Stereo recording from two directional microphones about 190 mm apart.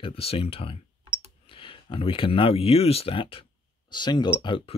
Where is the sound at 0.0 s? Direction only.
30° left (ahead or behind).